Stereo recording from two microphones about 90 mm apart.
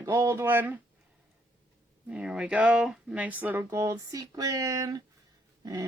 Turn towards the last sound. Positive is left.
turn(degrees=-45)  # may be behind; listen again after turning